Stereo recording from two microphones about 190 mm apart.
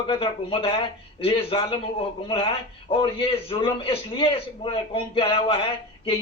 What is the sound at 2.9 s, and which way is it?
A man's voice, 25° left (ahead or behind).